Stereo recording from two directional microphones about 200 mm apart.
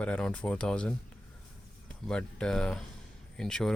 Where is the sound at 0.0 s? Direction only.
5° left (ahead or behind).